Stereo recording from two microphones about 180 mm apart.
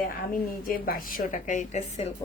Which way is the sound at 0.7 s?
50° left (ahead or behind).